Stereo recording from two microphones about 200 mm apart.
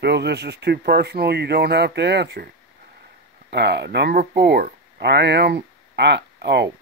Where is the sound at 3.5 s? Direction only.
60° right (ahead or behind).